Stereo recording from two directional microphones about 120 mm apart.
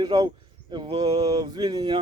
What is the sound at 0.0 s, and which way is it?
Speech, 35° right (ahead or behind).